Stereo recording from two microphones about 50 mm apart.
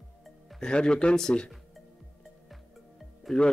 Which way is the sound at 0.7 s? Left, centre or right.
Centre.